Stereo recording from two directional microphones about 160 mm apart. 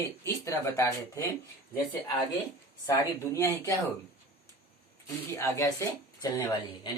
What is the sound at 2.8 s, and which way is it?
Speech, 20° left (ahead or behind).